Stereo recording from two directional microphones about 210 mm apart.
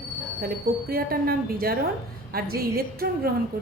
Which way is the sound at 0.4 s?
45° right (ahead or behind).